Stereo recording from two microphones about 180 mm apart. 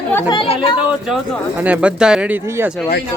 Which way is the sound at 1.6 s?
10° right (ahead or behind).